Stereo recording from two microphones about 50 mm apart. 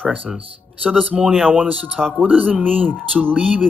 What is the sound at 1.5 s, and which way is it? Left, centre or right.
Speech, right.